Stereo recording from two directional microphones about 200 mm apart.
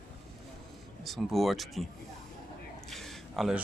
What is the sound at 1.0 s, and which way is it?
Speech, centre (ahead or behind).